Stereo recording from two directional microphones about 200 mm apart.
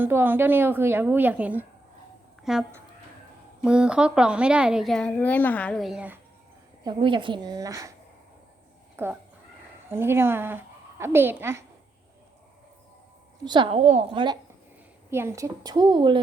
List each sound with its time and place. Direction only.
0.0 s a woman's voice: 10° right (ahead or behind)
6.8 s speech: 25° right (ahead or behind)
9.0 s a woman's voice: 10° right (ahead or behind)
13.4 s speech: 25° right (ahead or behind)
15.1 s speech: 15° right (ahead or behind)